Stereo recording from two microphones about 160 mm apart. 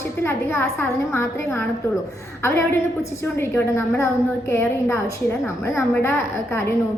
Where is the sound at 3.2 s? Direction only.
15° left (ahead or behind).